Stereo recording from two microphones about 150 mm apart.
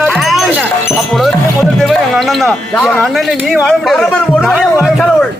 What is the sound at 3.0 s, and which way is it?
Speech, centre (ahead or behind).